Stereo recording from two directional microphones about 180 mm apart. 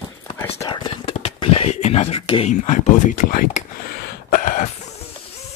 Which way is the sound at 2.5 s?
40° left (ahead or behind).